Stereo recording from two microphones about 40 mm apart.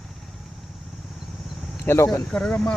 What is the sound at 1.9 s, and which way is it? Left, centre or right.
Speech, left.